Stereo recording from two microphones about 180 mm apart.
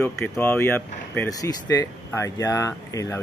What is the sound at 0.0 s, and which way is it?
Speech, 10° left (ahead or behind).